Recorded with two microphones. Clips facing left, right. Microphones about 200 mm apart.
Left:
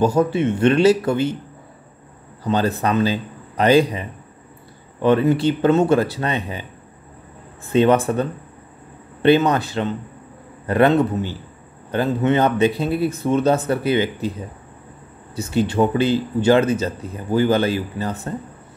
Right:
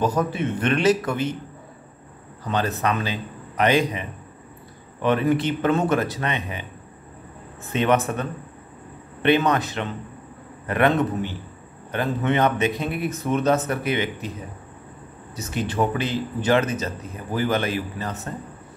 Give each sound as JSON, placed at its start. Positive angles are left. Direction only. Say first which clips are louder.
{"t": 0.0, "sound": "a man's voice", "louder": "left 6 dB", "side_deg": 30}
{"t": 2.4, "sound": "a man's voice", "louder": "left 4 dB", "side_deg": 30}
{"t": 5.0, "sound": "speech", "louder": "left 5 dB", "side_deg": 30}
{"t": 7.6, "sound": "speech", "louder": "left 6 dB", "side_deg": 30}
{"t": 15.3, "sound": "speech", "louder": "left 6 dB", "side_deg": 30}